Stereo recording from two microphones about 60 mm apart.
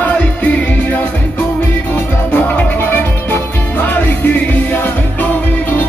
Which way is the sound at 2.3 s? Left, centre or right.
Left.